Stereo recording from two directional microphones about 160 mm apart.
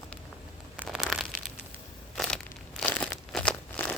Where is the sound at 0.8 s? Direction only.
Centre (ahead or behind).